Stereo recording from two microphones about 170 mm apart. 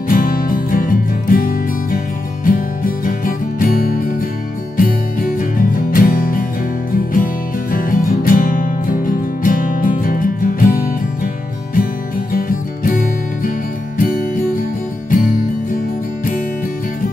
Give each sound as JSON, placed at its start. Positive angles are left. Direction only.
{"t": 0.1, "sound": "music", "side_deg": 55}
{"t": 7.7, "sound": "music", "side_deg": 55}